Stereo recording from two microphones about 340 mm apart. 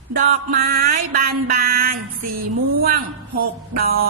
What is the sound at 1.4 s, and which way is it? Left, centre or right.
Speech, right.